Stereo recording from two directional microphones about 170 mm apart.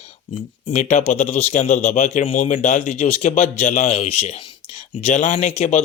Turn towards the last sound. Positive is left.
turn(degrees=40)  # may be behind; listen again after turning